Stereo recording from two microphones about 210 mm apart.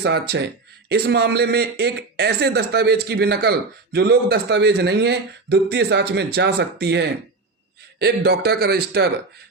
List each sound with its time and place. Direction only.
0.0 s speech: 50° right (ahead or behind)